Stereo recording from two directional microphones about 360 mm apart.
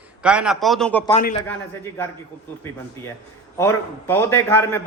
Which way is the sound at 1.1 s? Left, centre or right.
Left.